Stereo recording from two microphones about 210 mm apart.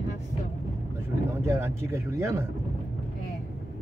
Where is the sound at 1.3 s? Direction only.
10° right (ahead or behind).